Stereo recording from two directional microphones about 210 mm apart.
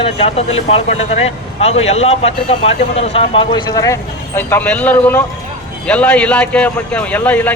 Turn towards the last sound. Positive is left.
turn(degrees=5)  # may be behind; listen again after turning